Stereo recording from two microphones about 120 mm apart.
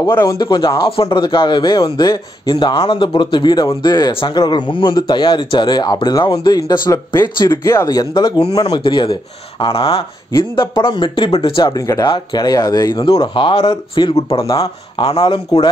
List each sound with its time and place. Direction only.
0.1 s speech: 25° left (ahead or behind)
0.4 s speech: 40° left (ahead or behind)
0.8 s speech: 50° left (ahead or behind); by 4.1 s 30° left (ahead or behind)
4.1 s speech: 50° left (ahead or behind)
8.5 s speech: 45° left (ahead or behind)
10.5 s speech: 45° left (ahead or behind)
11.7 s speech: 30° left (ahead or behind)
13.2 s speech: 45° left (ahead or behind)
14.4 s speech: 30° left (ahead or behind)
15.0 s speech: 45° left (ahead or behind)